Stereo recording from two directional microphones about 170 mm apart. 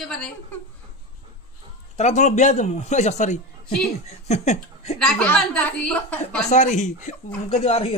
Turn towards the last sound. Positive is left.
turn(degrees=35)  # may be behind; listen again after turning